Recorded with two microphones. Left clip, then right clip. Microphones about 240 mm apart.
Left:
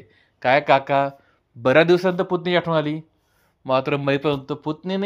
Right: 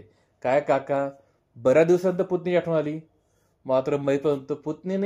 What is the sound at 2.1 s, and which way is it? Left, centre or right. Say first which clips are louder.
Speech: left 3 dB; left.